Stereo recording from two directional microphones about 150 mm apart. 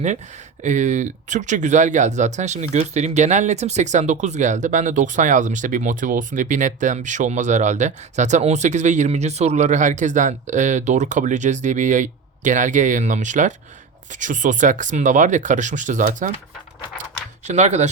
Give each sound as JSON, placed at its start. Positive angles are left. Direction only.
{"t": 0.6, "sound": "speech", "side_deg": -55}
{"t": 17.4, "sound": "speech", "side_deg": -50}